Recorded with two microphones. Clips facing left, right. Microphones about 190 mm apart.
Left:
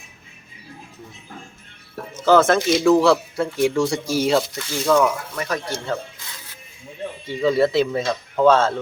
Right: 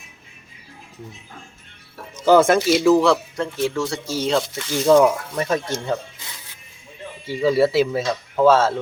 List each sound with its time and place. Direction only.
2.2 s speech: 15° right (ahead or behind); by 4.4 s 10° left (ahead or behind)
4.7 s speech: 30° right (ahead or behind)
7.3 s speech: 5° right (ahead or behind)